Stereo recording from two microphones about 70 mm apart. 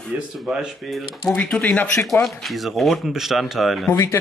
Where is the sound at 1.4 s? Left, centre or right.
Centre.